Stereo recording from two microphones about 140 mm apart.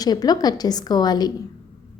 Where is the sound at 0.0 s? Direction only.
30° left (ahead or behind).